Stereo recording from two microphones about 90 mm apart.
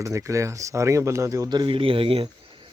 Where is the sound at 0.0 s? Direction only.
35° right (ahead or behind).